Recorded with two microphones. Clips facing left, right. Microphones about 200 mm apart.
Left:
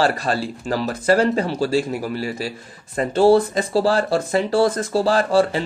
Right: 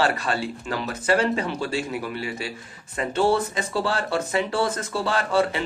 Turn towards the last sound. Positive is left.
turn(degrees=35)  # may be behind; listen again after turning